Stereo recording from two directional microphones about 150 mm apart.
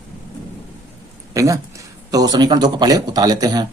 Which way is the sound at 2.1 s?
25° right (ahead or behind).